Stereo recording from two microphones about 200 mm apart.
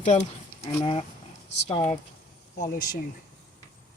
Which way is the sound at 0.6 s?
20° left (ahead or behind).